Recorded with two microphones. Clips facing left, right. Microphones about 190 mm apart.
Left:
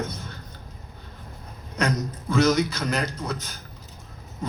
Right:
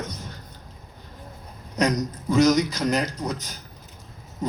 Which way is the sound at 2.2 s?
40° right (ahead or behind).